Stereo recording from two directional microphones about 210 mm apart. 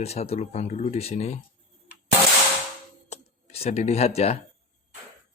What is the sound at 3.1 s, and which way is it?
Computer keyboard, 30° left (ahead or behind).